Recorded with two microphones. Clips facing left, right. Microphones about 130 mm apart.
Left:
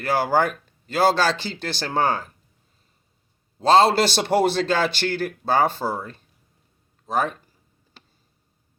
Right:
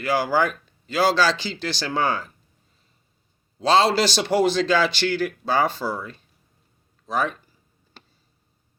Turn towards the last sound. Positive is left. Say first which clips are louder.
# left 1 dB
turn(degrees=45)  # may be behind; listen again after turning